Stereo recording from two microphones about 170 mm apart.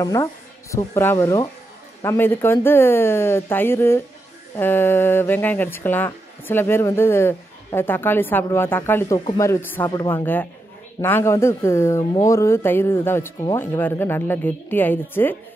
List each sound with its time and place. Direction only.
0.0 s speech: 20° left (ahead or behind)
10.2 s speech: 10° left (ahead or behind)